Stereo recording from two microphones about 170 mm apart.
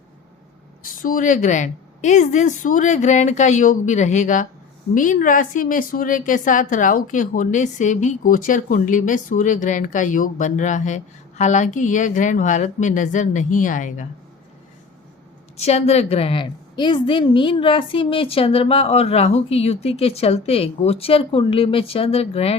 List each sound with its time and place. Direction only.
1.0 s a woman's voice: 50° left (ahead or behind)
15.6 s a woman's voice: 40° left (ahead or behind)